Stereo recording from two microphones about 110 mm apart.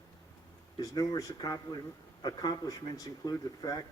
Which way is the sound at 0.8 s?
35° left (ahead or behind).